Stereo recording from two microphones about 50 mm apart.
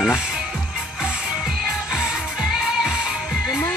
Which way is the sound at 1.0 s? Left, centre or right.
Centre.